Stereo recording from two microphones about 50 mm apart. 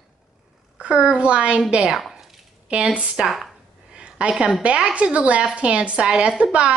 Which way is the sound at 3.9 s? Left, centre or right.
Right.